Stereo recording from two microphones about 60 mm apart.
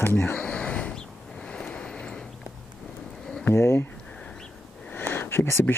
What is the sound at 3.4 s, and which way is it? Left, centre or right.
Speech, left.